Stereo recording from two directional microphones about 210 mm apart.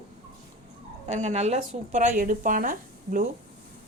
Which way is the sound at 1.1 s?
35° right (ahead or behind).